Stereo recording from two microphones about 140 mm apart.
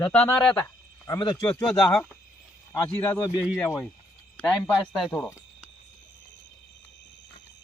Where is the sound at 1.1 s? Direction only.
30° left (ahead or behind).